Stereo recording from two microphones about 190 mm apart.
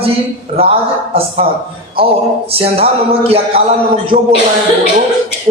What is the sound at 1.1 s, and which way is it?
A woman's voice, 30° right (ahead or behind).